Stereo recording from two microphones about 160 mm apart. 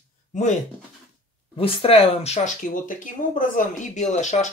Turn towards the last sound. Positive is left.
turn(degrees=50)  # may be behind; listen again after turning